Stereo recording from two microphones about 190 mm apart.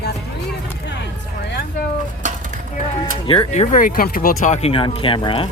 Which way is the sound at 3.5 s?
40° left (ahead or behind).